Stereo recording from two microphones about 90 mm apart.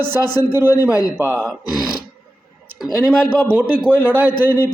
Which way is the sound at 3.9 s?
15° left (ahead or behind).